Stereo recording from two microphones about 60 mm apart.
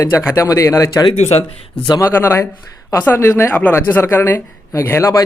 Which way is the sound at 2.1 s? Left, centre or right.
Left.